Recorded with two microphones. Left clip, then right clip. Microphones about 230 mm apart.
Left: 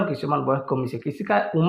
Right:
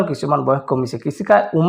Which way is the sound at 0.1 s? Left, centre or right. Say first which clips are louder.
Right 6 dB; right.